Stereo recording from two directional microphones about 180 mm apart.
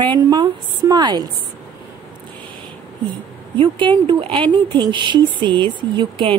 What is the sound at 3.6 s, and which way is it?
Speech, 25° right (ahead or behind).